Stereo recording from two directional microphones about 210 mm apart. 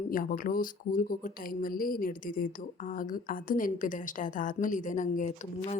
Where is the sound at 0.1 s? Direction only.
40° left (ahead or behind).